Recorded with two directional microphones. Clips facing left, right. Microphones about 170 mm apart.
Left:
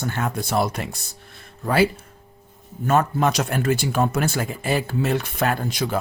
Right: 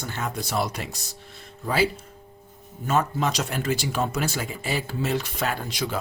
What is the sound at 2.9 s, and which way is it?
Speech, 55° left (ahead or behind).